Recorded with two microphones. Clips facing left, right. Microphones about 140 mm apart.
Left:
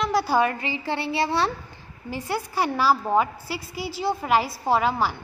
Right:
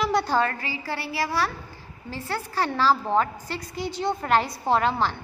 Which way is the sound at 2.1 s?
15° left (ahead or behind).